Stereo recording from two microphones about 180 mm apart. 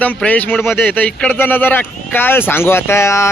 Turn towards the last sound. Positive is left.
turn(degrees=15)  # may be behind; listen again after turning